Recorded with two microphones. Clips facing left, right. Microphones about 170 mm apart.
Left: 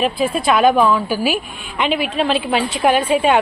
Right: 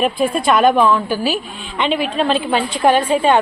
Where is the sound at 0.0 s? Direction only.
Centre (ahead or behind).